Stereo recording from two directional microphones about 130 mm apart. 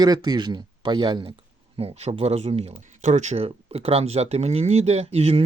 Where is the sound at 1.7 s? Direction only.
55° right (ahead or behind).